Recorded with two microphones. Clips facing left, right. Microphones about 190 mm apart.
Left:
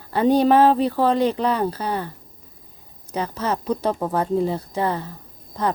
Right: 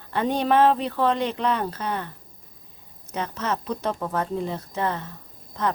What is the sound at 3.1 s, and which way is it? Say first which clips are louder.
A woman's voice: left 3 dB; 35° left (ahead or behind).